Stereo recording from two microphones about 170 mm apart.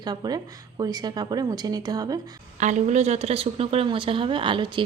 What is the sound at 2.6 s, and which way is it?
A woman's voice, 45° right (ahead or behind).